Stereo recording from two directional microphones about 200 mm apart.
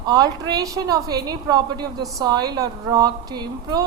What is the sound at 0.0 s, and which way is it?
A woman's voice, 20° right (ahead or behind).